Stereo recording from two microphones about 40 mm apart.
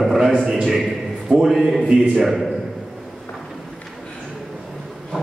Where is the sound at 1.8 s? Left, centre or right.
Right.